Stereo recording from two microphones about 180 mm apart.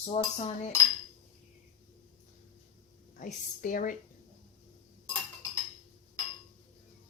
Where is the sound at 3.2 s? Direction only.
45° left (ahead or behind).